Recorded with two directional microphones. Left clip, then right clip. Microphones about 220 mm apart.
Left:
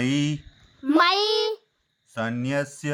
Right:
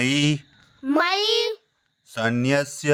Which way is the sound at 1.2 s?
10° left (ahead or behind).